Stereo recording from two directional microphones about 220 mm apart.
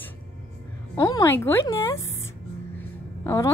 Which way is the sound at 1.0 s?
15° left (ahead or behind).